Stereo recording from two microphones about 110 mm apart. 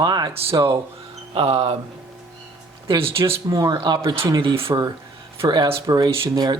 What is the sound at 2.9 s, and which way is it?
Speech, 55° right (ahead or behind).